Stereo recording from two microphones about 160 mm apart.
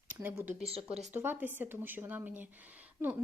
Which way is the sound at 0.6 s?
40° right (ahead or behind).